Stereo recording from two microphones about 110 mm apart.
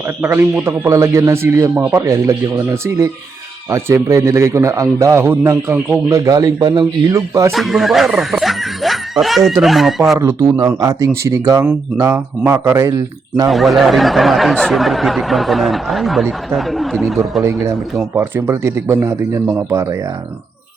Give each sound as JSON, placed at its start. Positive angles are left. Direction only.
{"t": 0.2, "sound": "a man's voice", "side_deg": -20}
{"t": 7.5, "sound": "speech", "side_deg": 0}
{"t": 10.2, "sound": "a man's voice", "side_deg": -30}
{"t": 13.5, "sound": "speech", "side_deg": 0}
{"t": 17.4, "sound": "a man's voice", "side_deg": -25}